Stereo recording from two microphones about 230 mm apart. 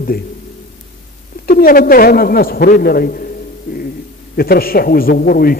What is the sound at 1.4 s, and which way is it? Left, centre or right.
A man's voice, left.